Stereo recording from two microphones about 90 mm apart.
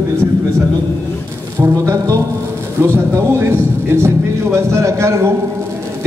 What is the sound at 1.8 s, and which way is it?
Speech, 30° right (ahead or behind).